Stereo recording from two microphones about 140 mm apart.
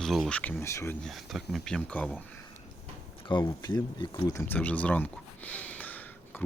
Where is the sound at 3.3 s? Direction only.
35° left (ahead or behind).